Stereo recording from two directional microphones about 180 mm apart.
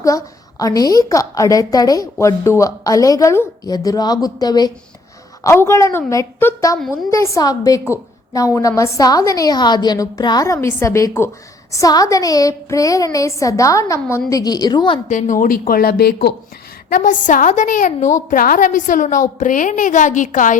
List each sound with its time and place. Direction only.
0.0 s a woman's voice: 20° left (ahead or behind)
6.7 s a woman's voice: centre (ahead or behind)
7.1 s a woman's voice: 15° left (ahead or behind)
15.1 s a woman's voice: 45° left (ahead or behind)
16.9 s a woman's voice: 45° left (ahead or behind)